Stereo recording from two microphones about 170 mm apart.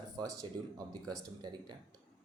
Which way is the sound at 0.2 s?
20° right (ahead or behind).